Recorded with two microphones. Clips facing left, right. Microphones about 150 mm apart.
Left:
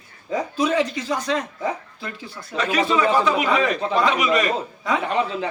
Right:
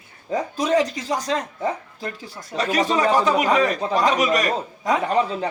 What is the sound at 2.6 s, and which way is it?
A man's voice, 40° right (ahead or behind).